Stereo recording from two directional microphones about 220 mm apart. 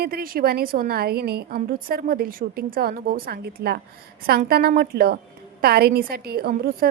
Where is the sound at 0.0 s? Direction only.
40° right (ahead or behind).